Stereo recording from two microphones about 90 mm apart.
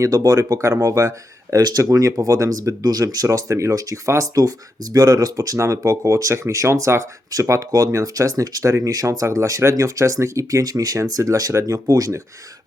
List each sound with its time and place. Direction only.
0.0 s speech: 40° right (ahead or behind)